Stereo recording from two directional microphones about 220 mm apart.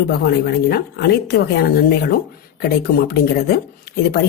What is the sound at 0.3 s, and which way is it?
A woman's voice, 45° left (ahead or behind).